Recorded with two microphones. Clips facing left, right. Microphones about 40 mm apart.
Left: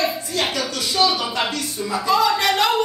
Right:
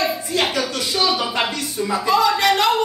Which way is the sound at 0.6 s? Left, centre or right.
Centre.